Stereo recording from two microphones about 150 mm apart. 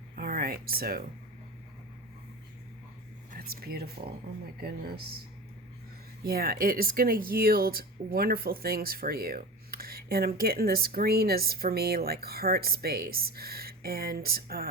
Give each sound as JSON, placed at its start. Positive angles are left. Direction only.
{"t": 0.2, "sound": "speech", "side_deg": -75}
{"t": 3.3, "sound": "speech", "side_deg": -90}
{"t": 6.2, "sound": "speech", "side_deg": -85}